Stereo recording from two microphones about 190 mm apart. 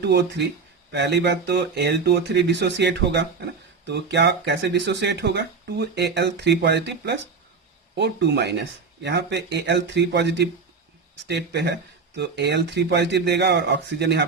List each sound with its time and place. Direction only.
0.0 s speech: 65° right (ahead or behind)